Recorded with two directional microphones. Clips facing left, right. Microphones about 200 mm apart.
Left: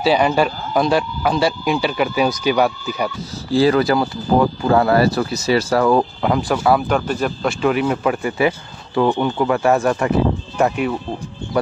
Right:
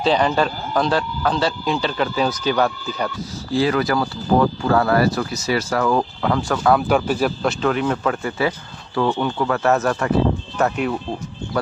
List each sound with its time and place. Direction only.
0.0 s speech: 10° left (ahead or behind)
3.5 s speech: 30° left (ahead or behind)
6.2 s speech: 10° left (ahead or behind)
6.9 s speech: 5° right (ahead or behind)
7.4 s speech: 10° left (ahead or behind)